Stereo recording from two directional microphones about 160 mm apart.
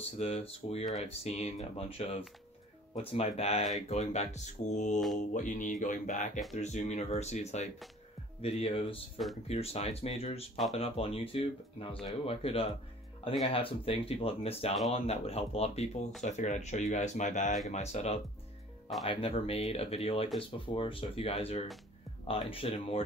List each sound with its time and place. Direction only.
0.2 s speech: 40° left (ahead or behind)